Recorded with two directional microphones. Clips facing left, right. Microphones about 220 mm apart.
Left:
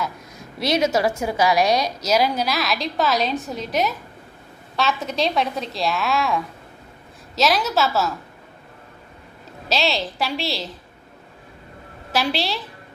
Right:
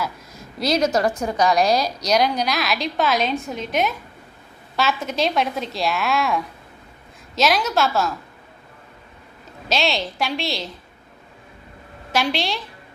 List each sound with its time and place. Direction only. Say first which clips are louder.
0.0 s a sound: even; centre (ahead or behind)
1.2 s a woman's voice: even; 5° left (ahead or behind)
9.6 s a woman's voice: even; centre (ahead or behind)
12.1 s a woman's voice: even; 5° left (ahead or behind)